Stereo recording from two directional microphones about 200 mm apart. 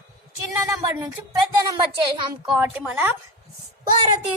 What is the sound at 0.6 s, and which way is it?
Speech, 15° right (ahead or behind).